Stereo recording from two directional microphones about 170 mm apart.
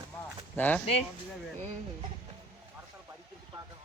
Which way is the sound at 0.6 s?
10° left (ahead or behind).